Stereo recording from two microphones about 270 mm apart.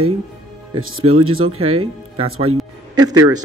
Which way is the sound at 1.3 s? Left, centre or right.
Right.